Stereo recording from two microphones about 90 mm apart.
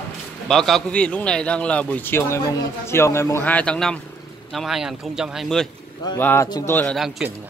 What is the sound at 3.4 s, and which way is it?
Speech, 15° left (ahead or behind).